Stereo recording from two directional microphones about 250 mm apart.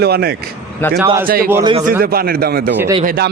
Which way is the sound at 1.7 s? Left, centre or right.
Right.